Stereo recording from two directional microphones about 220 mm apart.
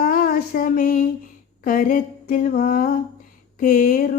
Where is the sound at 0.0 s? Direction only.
40° left (ahead or behind).